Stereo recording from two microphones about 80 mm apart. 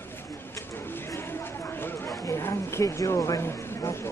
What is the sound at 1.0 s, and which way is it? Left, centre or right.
Chatter, left.